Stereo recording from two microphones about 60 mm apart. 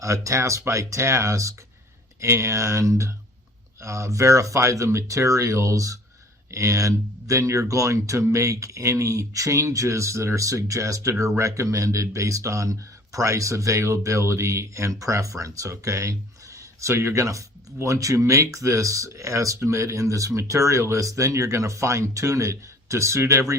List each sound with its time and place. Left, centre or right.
0.0 s speech: right
16.8 s speech: right